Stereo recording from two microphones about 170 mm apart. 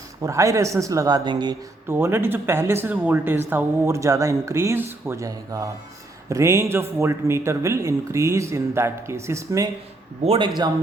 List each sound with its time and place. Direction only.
0.2 s speech: 20° right (ahead or behind)
1.9 s speech: 15° right (ahead or behind)
10.2 s speech: 30° right (ahead or behind)